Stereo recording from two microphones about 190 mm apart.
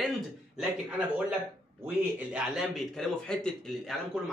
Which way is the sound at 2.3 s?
Centre (ahead or behind).